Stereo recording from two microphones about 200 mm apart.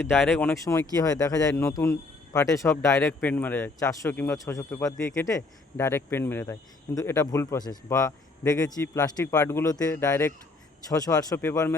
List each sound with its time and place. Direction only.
0.3 s speech: 15° left (ahead or behind)